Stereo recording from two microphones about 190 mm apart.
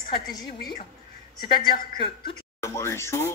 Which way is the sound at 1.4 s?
25° left (ahead or behind).